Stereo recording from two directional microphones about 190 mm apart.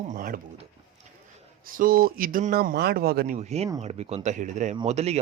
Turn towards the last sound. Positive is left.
turn(degrees=-35)  # may be behind; listen again after turning